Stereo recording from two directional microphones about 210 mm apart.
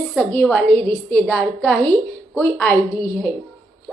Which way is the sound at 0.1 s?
10° left (ahead or behind).